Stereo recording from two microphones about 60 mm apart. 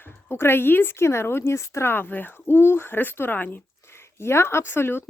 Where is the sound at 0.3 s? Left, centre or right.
Left.